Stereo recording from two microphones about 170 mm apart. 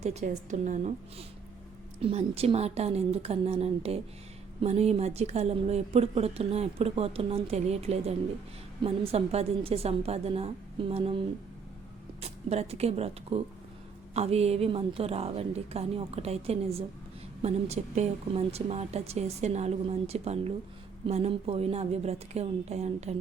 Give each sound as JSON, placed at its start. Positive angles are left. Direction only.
{"t": 0.0, "sound": "a woman's voice", "side_deg": -40}
{"t": 2.0, "sound": "speech", "side_deg": -35}
{"t": 12.2, "sound": "speech", "side_deg": -40}